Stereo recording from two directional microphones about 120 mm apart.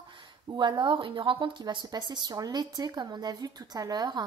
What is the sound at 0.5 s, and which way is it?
A woman's voice, 40° right (ahead or behind).